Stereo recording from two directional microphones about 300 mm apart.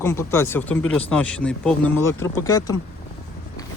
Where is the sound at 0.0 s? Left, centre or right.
Centre.